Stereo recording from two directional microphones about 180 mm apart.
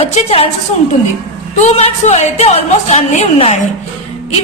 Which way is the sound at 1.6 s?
35° left (ahead or behind).